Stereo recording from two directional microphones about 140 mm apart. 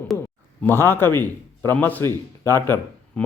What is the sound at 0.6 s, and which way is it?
A man's voice, 15° left (ahead or behind).